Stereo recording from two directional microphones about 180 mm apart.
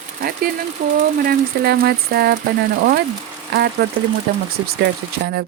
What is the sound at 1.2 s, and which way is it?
Speech, 55° right (ahead or behind).